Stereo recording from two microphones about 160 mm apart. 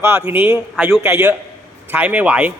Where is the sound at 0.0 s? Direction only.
15° right (ahead or behind).